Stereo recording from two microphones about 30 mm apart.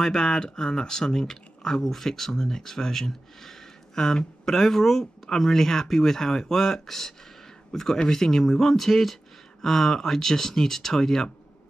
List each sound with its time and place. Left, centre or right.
0.0 s speech: centre